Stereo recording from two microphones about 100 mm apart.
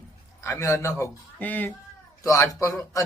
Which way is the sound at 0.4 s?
30° left (ahead or behind).